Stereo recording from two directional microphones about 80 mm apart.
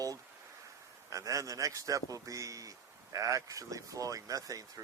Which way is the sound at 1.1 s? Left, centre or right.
Right.